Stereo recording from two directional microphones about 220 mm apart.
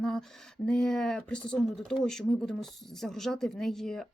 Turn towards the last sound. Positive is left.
turn(degrees=0)  # may be behind; listen again after turning